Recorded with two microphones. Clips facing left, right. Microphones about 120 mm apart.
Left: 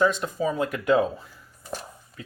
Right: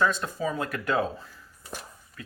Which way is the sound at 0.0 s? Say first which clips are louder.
Left 3 dB; 20° left (ahead or behind).